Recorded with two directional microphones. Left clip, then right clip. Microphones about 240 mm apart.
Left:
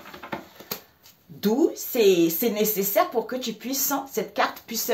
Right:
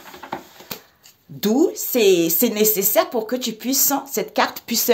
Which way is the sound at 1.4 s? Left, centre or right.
Right.